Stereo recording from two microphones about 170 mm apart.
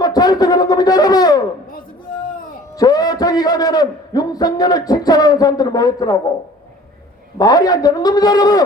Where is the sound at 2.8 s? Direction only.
20° left (ahead or behind).